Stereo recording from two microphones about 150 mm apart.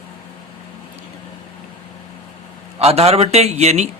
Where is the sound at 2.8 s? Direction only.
45° right (ahead or behind).